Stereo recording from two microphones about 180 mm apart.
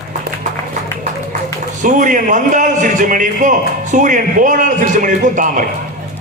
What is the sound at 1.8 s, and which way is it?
A man's voice, 45° right (ahead or behind).